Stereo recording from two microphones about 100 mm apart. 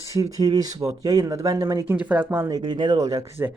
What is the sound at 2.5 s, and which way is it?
Speech, 50° right (ahead or behind).